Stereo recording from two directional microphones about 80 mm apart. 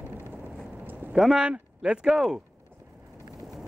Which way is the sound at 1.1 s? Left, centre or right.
Centre.